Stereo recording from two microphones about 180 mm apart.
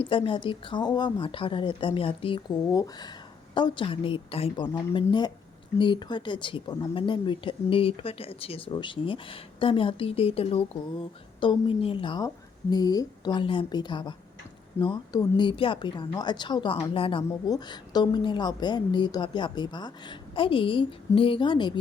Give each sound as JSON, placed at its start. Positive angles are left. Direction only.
{"t": 0.0, "sound": "speech", "side_deg": 30}
{"t": 5.8, "sound": "speech", "side_deg": 25}